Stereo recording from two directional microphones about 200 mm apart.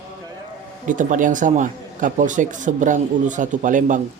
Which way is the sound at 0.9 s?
40° right (ahead or behind).